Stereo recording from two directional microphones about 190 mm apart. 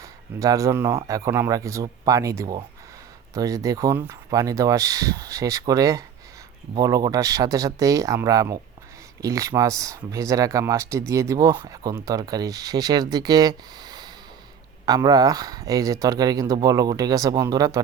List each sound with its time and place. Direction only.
0.0 s speech: 20° right (ahead or behind)